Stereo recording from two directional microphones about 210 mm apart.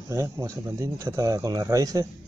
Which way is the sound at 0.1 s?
15° right (ahead or behind).